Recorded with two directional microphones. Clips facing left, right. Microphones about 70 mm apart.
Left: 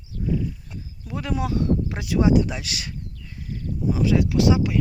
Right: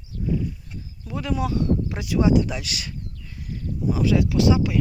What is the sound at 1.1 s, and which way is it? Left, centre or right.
Speech, left.